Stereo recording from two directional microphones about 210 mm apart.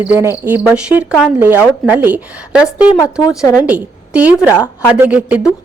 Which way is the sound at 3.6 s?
5° right (ahead or behind).